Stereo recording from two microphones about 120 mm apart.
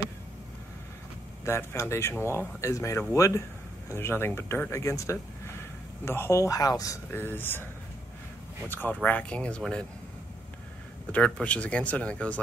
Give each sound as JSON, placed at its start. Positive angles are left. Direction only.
{"t": 1.4, "sound": "speech", "side_deg": 20}
{"t": 7.1, "sound": "speech", "side_deg": 15}
{"t": 8.6, "sound": "speech", "side_deg": 15}
{"t": 11.1, "sound": "speech", "side_deg": 10}